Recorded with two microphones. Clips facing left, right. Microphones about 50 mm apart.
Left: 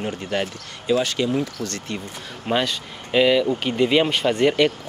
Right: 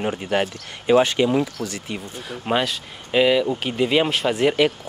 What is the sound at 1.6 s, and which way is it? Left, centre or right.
Speech, centre.